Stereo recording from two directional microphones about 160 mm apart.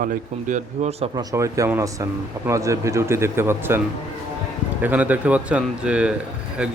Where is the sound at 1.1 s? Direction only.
20° right (ahead or behind).